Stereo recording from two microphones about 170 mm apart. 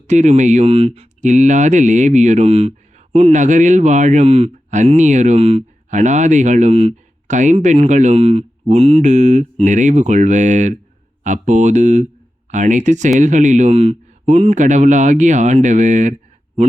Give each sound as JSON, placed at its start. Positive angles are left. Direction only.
{"t": 0.1, "sound": "speech", "side_deg": -45}